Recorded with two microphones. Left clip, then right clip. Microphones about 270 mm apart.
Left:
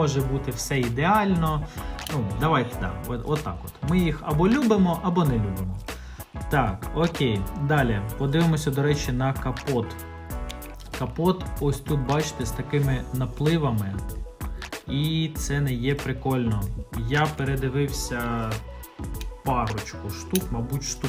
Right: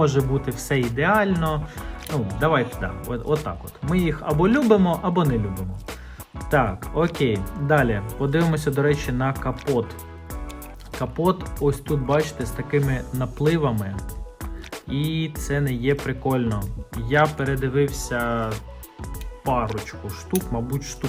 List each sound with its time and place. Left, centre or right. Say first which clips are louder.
0.0 s speech: right 5 dB; centre
10.9 s speech: right 3 dB; centre
14.8 s music: right 1 dB; right
15.9 s speech: right 5 dB; centre